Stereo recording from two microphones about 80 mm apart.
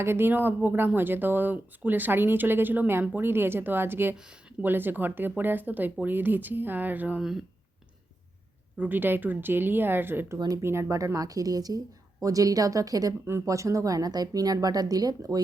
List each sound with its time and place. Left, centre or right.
0.0 s speech: right
7.2 s speech: centre
8.8 s speech: right